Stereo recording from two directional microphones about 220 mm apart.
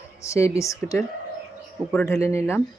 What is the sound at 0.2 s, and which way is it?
Speech, 15° left (ahead or behind).